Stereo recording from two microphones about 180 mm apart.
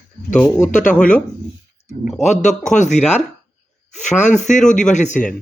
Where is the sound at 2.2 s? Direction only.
40° left (ahead or behind).